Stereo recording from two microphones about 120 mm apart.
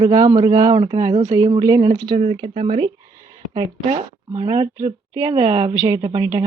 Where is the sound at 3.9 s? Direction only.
70° right (ahead or behind).